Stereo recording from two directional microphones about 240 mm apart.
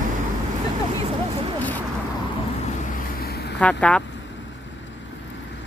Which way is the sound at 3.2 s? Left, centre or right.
Left.